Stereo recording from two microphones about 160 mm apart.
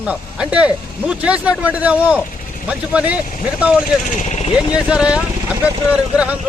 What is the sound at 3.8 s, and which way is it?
Speech, 50° left (ahead or behind).